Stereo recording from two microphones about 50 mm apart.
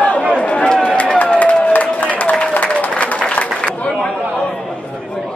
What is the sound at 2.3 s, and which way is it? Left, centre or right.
Applause, left.